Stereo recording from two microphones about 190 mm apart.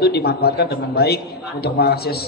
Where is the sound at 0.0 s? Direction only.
60° left (ahead or behind).